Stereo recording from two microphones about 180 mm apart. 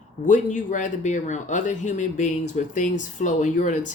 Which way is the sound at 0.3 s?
45° left (ahead or behind).